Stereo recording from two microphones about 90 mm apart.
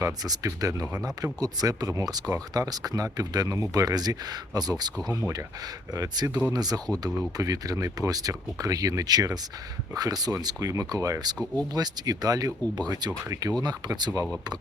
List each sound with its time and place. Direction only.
0.0 s speech: 40° right (ahead or behind)
5.9 s speech: 40° right (ahead or behind)